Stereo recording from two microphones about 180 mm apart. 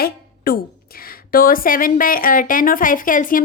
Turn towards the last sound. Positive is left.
turn(degrees=50)  # may be behind; listen again after turning